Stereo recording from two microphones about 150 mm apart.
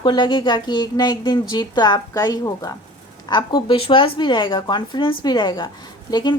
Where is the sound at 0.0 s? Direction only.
30° left (ahead or behind).